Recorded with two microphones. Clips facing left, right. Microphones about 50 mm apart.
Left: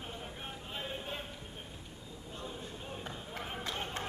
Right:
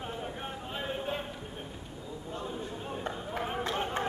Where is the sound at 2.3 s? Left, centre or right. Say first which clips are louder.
Right 6 dB; centre.